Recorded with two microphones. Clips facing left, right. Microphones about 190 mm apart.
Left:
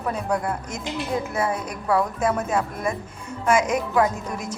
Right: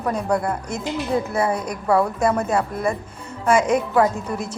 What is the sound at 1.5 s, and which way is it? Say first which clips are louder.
Speech: right 3 dB; 35° right (ahead or behind).